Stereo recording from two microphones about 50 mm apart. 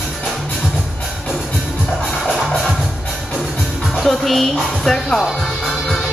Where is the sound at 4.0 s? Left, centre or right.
Centre.